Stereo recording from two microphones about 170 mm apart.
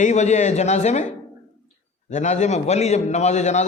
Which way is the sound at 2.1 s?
45° left (ahead or behind).